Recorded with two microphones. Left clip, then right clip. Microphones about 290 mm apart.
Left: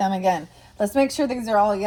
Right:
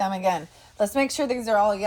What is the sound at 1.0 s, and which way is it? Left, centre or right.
Speech, right.